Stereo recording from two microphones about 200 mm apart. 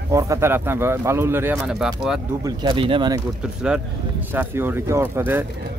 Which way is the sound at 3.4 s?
5° right (ahead or behind).